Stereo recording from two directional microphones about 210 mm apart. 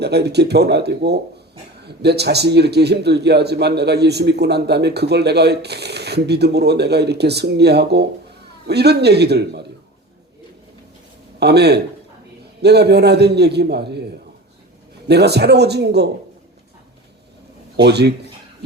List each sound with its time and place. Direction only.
0.0 s a man's voice: 50° right (ahead or behind)
11.3 s a man's voice: 50° right (ahead or behind)
15.0 s a man's voice: 50° right (ahead or behind)
17.8 s a man's voice: 50° right (ahead or behind)